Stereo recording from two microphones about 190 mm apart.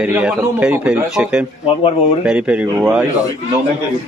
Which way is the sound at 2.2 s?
5° right (ahead or behind).